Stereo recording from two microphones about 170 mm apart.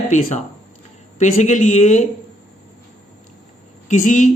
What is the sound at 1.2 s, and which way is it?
Speech, 45° left (ahead or behind).